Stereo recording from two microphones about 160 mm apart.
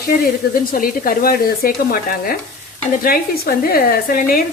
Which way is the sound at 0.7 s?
65° left (ahead or behind).